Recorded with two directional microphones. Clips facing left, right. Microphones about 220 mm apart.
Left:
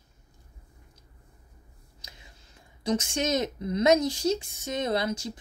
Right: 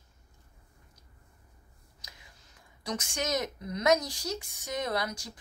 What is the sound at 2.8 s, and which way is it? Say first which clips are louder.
A woman's voice: left 7 dB; 25° left (ahead or behind).